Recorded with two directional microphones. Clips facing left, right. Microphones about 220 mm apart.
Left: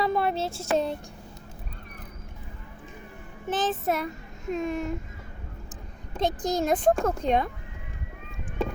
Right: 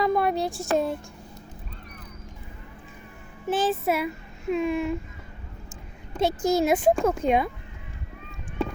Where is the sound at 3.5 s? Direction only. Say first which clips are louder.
Right 3 dB; 10° right (ahead or behind).